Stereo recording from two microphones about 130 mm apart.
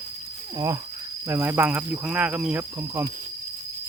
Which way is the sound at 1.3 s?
20° right (ahead or behind).